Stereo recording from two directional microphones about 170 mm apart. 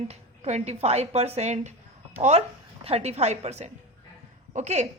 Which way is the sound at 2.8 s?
35° right (ahead or behind).